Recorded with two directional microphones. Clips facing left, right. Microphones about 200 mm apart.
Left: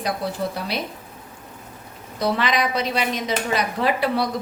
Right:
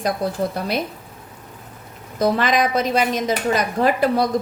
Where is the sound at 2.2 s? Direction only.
45° right (ahead or behind).